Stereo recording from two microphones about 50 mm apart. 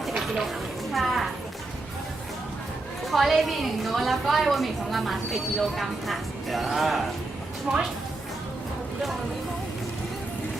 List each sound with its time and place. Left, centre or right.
0.0 s a sound: centre
0.9 s a woman's voice: centre
3.1 s a woman's voice: centre
7.7 s speech: right